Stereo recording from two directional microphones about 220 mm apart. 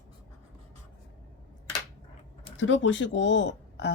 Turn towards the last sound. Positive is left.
turn(degrees=50)  # may be behind; listen again after turning